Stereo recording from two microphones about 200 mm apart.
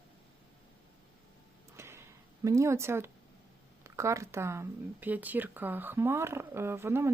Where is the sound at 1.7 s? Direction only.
10° right (ahead or behind).